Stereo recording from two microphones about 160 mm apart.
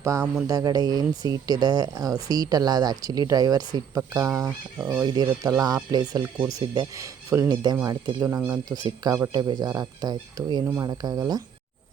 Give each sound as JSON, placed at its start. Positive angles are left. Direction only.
{"t": 0.0, "sound": "a sound", "side_deg": -20}
{"t": 0.4, "sound": "speech", "side_deg": -25}
{"t": 5.0, "sound": "speech", "side_deg": -25}